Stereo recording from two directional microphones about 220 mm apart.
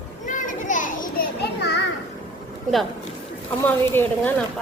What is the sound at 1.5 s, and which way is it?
Children playing, 50° left (ahead or behind).